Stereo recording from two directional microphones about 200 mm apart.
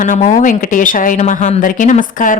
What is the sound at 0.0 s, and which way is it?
A woman's voice, 40° left (ahead or behind).